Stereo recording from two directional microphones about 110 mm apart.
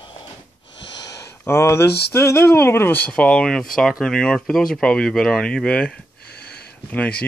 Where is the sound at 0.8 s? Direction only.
35° left (ahead or behind); by 3.0 s 20° left (ahead or behind).